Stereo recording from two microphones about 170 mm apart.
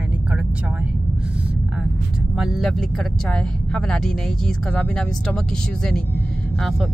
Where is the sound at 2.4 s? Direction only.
Centre (ahead or behind).